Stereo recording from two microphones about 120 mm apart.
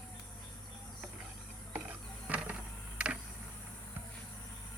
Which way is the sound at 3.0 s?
10° right (ahead or behind).